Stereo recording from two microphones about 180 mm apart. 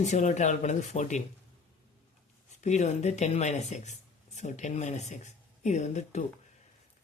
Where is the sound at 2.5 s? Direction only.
40° left (ahead or behind).